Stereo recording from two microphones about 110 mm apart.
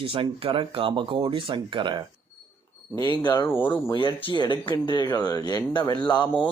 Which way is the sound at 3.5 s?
20° left (ahead or behind).